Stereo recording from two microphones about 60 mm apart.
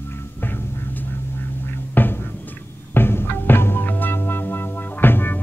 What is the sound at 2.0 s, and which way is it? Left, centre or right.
Music, left.